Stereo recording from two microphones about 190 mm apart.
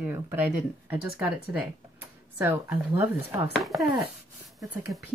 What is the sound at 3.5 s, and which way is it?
Speech, centre (ahead or behind).